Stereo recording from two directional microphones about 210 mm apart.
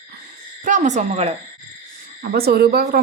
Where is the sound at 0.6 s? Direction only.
35° right (ahead or behind).